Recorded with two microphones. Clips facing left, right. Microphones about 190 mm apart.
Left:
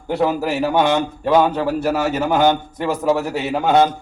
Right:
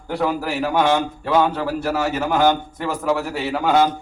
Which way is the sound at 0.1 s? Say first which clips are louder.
Left 3 dB; 20° left (ahead or behind).